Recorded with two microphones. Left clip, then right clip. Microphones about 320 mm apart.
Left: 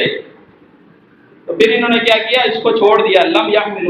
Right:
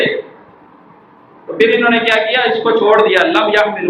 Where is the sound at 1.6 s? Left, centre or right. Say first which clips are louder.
Right 1 dB; centre.